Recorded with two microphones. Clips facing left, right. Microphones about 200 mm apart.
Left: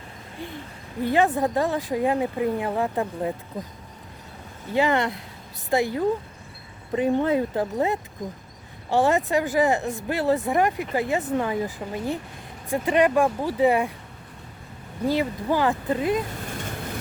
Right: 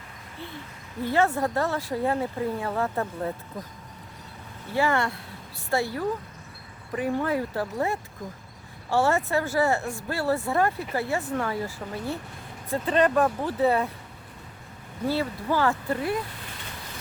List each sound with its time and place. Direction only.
1.0 s speech: 15° left (ahead or behind)
4.7 s speech: 20° left (ahead or behind)
15.0 s speech: 15° left (ahead or behind)